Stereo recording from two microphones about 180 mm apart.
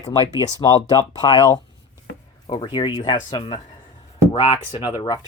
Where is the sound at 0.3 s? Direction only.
20° left (ahead or behind).